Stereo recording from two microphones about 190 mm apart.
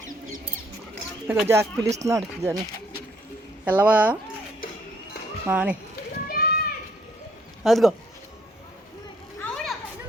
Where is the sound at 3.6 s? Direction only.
10° right (ahead or behind).